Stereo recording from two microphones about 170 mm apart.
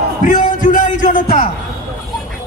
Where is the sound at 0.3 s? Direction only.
50° left (ahead or behind).